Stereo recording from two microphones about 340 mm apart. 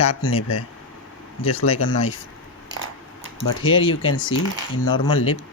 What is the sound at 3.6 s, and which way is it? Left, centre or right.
Speech, left.